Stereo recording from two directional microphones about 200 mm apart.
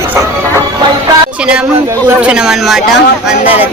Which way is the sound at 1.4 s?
5° right (ahead or behind).